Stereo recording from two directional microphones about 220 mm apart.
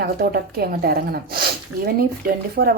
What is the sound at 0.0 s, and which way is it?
Speech, 45° right (ahead or behind).